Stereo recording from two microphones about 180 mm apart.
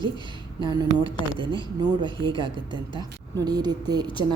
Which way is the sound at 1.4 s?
25° right (ahead or behind).